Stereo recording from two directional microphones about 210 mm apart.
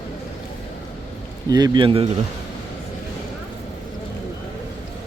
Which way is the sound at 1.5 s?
20° right (ahead or behind).